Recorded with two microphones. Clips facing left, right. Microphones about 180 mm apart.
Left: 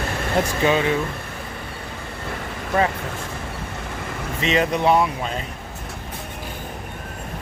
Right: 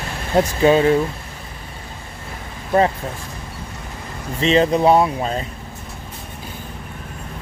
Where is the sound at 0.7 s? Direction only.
40° right (ahead or behind).